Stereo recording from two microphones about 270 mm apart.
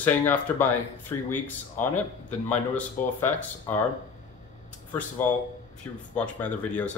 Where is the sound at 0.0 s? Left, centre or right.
Centre.